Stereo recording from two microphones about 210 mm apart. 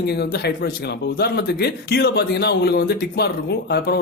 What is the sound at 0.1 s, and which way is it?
Speech, 50° left (ahead or behind).